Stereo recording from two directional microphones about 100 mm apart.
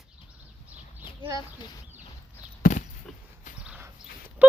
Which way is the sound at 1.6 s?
50° left (ahead or behind).